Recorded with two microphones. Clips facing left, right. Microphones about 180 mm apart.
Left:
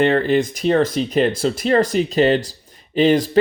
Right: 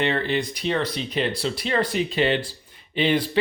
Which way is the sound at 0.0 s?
45° left (ahead or behind).